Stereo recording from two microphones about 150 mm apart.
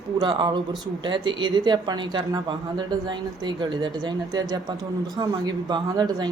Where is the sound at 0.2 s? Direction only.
30° right (ahead or behind).